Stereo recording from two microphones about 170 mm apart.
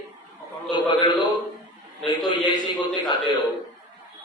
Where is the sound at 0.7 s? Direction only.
25° left (ahead or behind).